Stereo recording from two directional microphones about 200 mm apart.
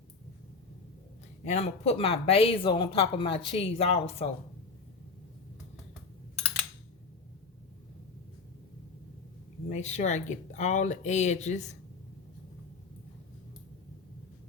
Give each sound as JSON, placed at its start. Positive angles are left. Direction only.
{"t": 1.5, "sound": "speech", "side_deg": 30}
{"t": 9.6, "sound": "speech", "side_deg": 35}